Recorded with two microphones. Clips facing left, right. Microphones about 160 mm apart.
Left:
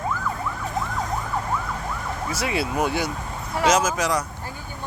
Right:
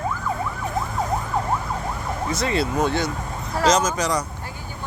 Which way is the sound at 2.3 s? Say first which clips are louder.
Right 3 dB; 10° left (ahead or behind).